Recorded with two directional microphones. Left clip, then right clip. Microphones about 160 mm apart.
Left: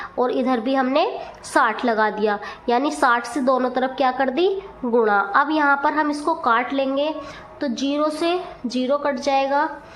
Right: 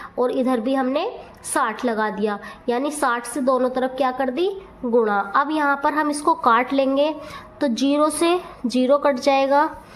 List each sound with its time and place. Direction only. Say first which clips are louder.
0.2 s a woman's voice: even; 25° right (ahead or behind); by 9.6 s 40° right (ahead or behind)